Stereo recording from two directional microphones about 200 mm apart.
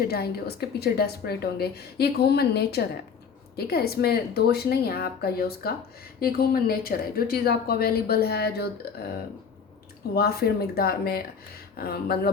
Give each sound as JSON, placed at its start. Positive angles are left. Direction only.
{"t": 0.1, "sound": "a woman's voice", "side_deg": 50}
{"t": 10.2, "sound": "a woman's voice", "side_deg": 50}